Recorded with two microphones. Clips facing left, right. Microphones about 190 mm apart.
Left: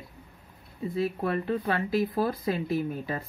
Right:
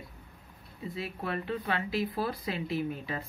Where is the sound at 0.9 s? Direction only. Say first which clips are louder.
Left 8 dB; 45° left (ahead or behind).